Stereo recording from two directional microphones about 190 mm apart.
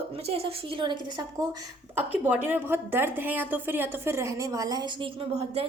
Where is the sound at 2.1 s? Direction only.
10° right (ahead or behind).